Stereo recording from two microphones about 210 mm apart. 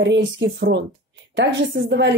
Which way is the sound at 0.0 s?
55° right (ahead or behind).